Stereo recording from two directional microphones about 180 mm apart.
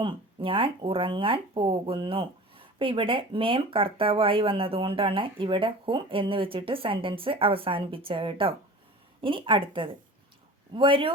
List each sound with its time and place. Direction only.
0.0 s speech: 30° right (ahead or behind)